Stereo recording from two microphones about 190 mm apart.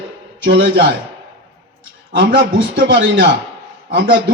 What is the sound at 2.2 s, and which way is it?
A man's voice, 75° right (ahead or behind).